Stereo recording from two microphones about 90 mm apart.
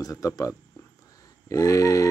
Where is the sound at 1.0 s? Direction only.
40° left (ahead or behind).